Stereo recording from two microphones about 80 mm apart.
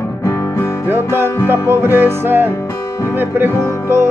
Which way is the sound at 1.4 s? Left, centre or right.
Right.